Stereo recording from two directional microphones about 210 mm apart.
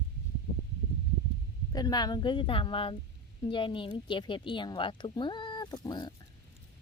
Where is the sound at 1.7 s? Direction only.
20° left (ahead or behind).